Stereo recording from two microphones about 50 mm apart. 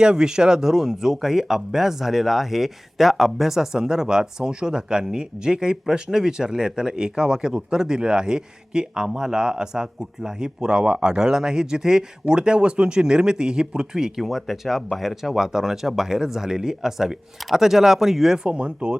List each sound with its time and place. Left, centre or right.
0.0 s speech: centre
18.4 s speech: right